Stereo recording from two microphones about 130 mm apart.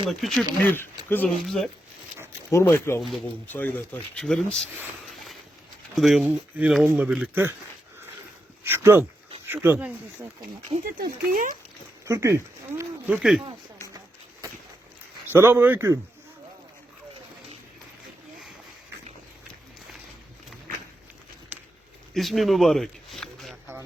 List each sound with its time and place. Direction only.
0.1 s speech: centre (ahead or behind)
0.6 s speech: 15° left (ahead or behind)
1.5 s speech: centre (ahead or behind)
2.5 s speech: 20° left (ahead or behind); by 4.6 s 5° left (ahead or behind)
6.0 s speech: centre (ahead or behind)
8.6 s speech: 15° right (ahead or behind)
10.9 s speech: 90° right
12.0 s speech: 20° right (ahead or behind)
13.1 s speech: 5° right (ahead or behind)
15.3 s speech: 20° right (ahead or behind)
21.5 s a sound: 15° right (ahead or behind)
22.1 s a sound: centre (ahead or behind)